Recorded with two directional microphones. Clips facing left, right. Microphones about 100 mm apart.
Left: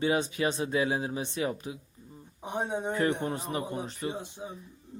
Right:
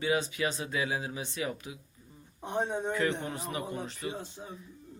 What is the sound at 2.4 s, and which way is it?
Speech, 10° left (ahead or behind).